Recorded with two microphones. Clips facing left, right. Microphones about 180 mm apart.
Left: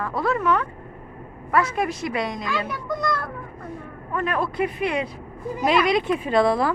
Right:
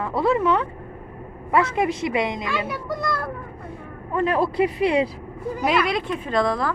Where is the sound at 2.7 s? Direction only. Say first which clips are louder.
Even; 5° right (ahead or behind).